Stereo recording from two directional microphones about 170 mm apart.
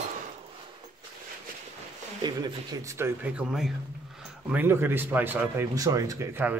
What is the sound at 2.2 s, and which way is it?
A man's voice, 25° right (ahead or behind).